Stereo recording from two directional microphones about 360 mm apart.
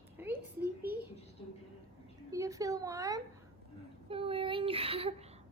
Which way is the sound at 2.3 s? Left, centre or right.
Centre.